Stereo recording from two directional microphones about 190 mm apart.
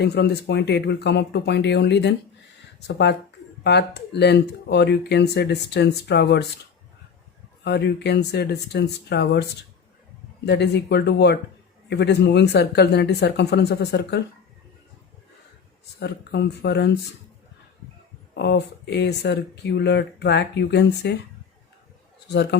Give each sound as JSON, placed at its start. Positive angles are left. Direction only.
{"t": 0.0, "sound": "speech", "side_deg": 60}
{"t": 7.6, "sound": "speech", "side_deg": 65}
{"t": 16.0, "sound": "speech", "side_deg": 60}
{"t": 18.3, "sound": "speech", "side_deg": 60}